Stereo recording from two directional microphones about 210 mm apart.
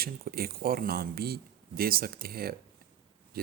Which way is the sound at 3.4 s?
45° right (ahead or behind).